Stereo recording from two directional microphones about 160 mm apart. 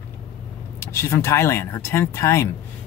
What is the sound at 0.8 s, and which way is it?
Speech, 15° left (ahead or behind).